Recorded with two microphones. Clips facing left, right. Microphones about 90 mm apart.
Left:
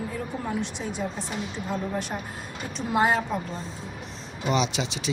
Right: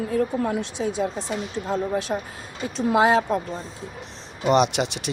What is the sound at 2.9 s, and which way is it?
Speech, 90° right.